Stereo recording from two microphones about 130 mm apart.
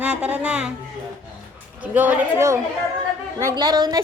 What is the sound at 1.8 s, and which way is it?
Speech, 10° right (ahead or behind).